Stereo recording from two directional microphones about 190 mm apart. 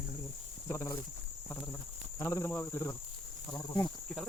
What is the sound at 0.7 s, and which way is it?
Speech, 15° left (ahead or behind).